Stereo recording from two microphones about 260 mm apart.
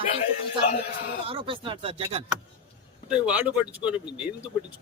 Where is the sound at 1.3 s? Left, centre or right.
Centre.